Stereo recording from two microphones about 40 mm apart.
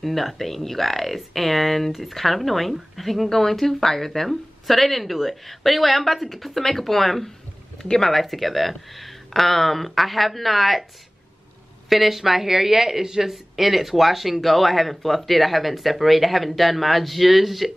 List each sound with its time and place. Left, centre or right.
0.0 s speech: centre
11.9 s speech: centre